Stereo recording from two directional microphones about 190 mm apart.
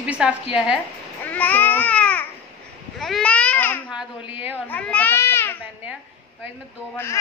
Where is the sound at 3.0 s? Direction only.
5° left (ahead or behind).